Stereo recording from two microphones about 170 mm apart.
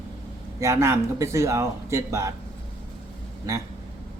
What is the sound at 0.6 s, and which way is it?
Speech, 15° right (ahead or behind).